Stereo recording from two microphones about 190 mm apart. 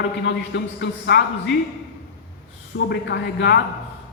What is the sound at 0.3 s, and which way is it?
Speech, 65° left (ahead or behind).